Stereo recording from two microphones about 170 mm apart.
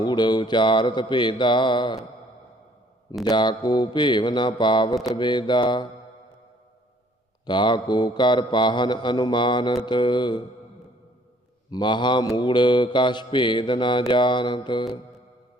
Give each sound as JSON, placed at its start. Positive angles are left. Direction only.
{"t": 0.0, "sound": "mantra", "side_deg": 25}
{"t": 3.2, "sound": "mantra", "side_deg": 25}
{"t": 7.4, "sound": "mantra", "side_deg": 25}
{"t": 11.7, "sound": "mantra", "side_deg": 25}